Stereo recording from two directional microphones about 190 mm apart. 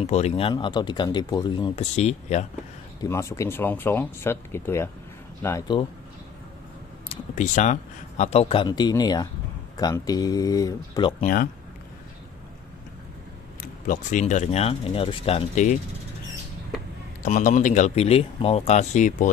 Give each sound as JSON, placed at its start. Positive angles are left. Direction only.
{"t": 0.0, "sound": "speech", "side_deg": 35}
{"t": 1.8, "sound": "speech", "side_deg": 35}
{"t": 3.0, "sound": "speech", "side_deg": 15}
{"t": 7.1, "sound": "speech", "side_deg": 40}
{"t": 13.8, "sound": "speech", "side_deg": 40}
{"t": 17.2, "sound": "speech", "side_deg": 40}